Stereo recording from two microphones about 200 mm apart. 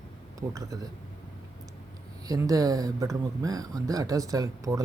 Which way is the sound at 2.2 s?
15° right (ahead or behind).